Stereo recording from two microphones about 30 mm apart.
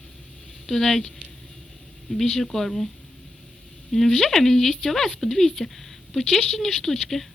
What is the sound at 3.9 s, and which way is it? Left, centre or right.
Speech, centre.